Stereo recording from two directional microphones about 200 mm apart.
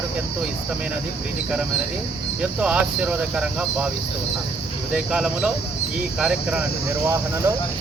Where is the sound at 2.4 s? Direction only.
5° right (ahead or behind).